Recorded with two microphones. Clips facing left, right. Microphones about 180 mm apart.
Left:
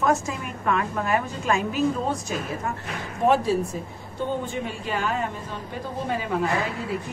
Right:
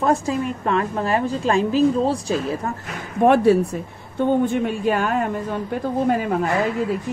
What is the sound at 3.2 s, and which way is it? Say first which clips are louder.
A woman's voice: right 6 dB; 60° right (ahead or behind).